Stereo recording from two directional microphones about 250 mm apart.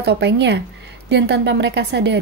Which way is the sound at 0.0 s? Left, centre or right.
Right.